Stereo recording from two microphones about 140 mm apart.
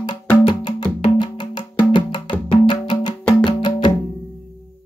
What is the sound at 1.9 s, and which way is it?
Wood block, 35° left (ahead or behind).